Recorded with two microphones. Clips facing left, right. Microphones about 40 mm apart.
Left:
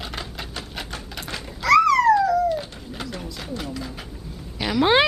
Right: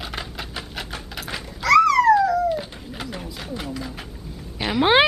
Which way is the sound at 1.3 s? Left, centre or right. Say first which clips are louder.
Right 1 dB; centre.